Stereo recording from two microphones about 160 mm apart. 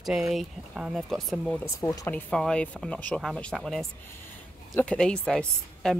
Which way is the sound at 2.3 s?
5° left (ahead or behind).